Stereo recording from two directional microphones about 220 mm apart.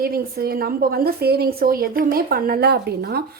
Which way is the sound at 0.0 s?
45° right (ahead or behind).